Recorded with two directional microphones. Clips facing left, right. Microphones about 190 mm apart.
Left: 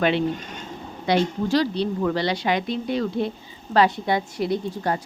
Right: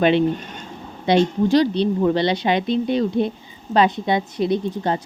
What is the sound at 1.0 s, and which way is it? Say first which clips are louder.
Speech: right 5 dB; 20° right (ahead or behind).